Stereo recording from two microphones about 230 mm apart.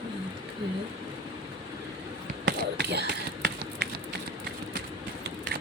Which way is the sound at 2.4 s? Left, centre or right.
Right.